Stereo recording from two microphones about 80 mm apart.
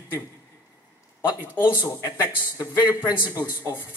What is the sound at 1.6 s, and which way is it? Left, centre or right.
Speech, left.